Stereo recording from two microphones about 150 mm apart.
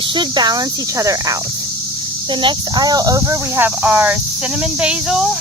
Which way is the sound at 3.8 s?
10° right (ahead or behind).